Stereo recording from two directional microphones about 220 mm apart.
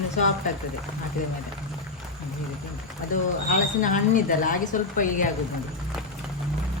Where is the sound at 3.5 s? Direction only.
35° left (ahead or behind).